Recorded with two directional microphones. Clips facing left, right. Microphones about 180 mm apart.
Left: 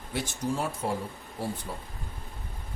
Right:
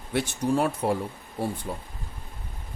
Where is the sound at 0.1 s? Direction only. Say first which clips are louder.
Right 6 dB; 65° right (ahead or behind).